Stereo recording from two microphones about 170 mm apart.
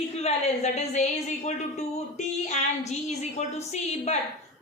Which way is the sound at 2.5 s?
45° left (ahead or behind).